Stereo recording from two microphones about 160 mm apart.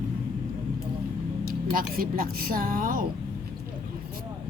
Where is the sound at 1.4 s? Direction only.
65° right (ahead or behind).